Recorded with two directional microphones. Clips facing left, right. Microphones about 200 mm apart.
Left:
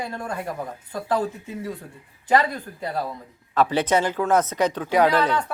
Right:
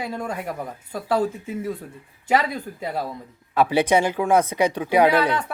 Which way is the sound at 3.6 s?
10° right (ahead or behind).